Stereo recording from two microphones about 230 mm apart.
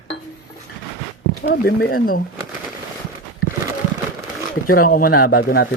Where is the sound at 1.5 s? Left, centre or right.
Left.